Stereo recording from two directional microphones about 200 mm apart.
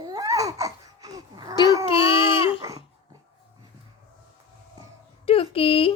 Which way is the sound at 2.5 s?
15° right (ahead or behind).